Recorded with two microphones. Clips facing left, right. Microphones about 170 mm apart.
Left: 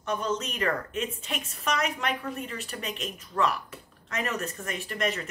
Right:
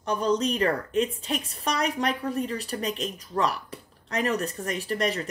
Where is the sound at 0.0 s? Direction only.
35° right (ahead or behind).